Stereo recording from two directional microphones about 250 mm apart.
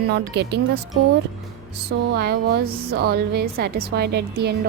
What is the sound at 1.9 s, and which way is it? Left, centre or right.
A woman's voice, right.